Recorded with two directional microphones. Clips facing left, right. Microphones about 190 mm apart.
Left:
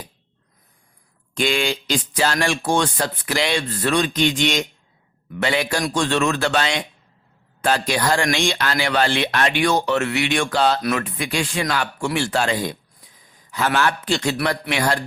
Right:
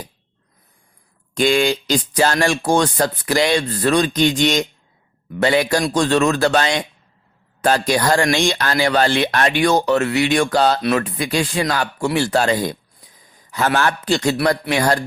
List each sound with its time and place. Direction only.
1.4 s speech: 40° right (ahead or behind)
13.7 s speech: 40° right (ahead or behind)